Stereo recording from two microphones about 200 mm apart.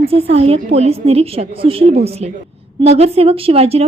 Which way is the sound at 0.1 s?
30° right (ahead or behind).